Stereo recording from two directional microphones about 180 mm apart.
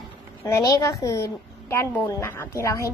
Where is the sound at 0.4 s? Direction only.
15° left (ahead or behind).